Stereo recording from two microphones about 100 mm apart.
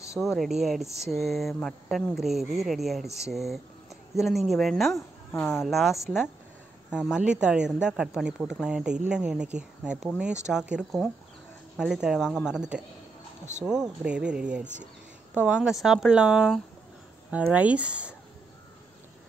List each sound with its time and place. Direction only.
0.4 s speech: centre (ahead or behind)
4.9 s speech: 25° left (ahead or behind)
5.5 s speech: centre (ahead or behind)
14.0 s speech: 10° right (ahead or behind)